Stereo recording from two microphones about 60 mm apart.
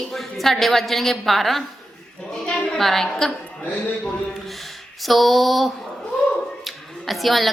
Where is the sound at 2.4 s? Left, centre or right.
Centre.